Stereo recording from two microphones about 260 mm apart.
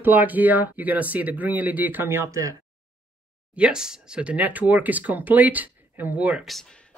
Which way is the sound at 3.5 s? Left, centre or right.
Centre.